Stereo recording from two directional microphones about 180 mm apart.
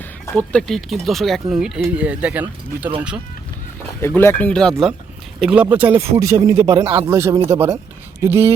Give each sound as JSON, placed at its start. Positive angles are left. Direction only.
{"t": 0.0, "sound": "speech", "side_deg": 5}
{"t": 4.0, "sound": "speech", "side_deg": 15}